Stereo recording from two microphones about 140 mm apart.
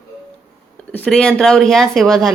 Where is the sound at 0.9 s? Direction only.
10° left (ahead or behind).